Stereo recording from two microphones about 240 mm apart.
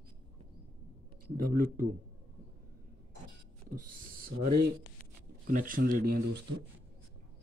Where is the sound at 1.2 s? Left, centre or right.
Right.